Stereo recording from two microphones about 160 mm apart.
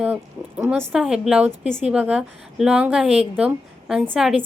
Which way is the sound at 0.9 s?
5° right (ahead or behind).